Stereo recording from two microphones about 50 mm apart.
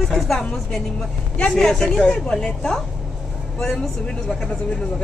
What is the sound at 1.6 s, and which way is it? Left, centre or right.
A woman's voice, centre.